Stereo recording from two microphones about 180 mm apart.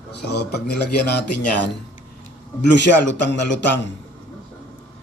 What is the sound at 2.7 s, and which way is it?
Speech, 80° left.